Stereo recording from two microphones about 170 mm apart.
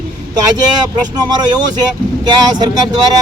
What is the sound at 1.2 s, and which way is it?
Speech, 25° right (ahead or behind).